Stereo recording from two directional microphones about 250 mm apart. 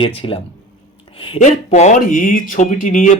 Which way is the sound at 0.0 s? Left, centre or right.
Left.